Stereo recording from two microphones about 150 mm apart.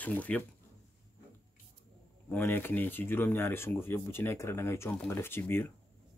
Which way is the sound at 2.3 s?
15° left (ahead or behind).